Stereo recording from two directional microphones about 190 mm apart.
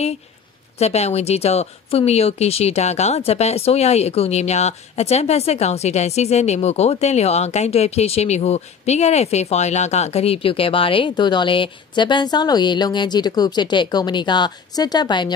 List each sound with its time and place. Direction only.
0.7 s speech: 35° left (ahead or behind)